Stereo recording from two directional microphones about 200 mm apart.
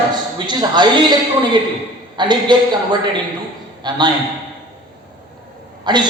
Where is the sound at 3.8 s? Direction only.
20° right (ahead or behind).